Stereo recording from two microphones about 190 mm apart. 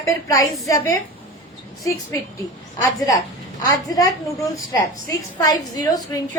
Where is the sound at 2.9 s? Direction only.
20° left (ahead or behind).